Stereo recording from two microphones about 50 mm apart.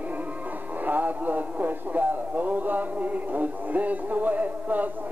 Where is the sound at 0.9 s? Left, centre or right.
Right.